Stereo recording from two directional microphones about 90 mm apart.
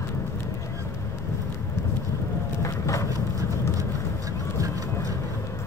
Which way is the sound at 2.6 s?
35° left (ahead or behind).